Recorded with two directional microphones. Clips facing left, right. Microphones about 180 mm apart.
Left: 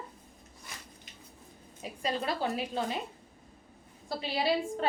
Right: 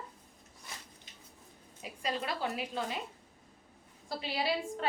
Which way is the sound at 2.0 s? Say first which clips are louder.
Left 3 dB; 30° left (ahead or behind).